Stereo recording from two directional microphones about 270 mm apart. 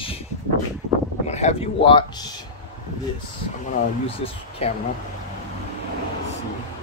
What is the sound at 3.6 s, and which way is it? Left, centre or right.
Speech, left.